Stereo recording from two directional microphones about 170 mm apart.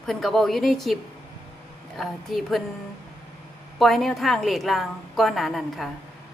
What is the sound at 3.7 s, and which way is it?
A man's voice, centre (ahead or behind).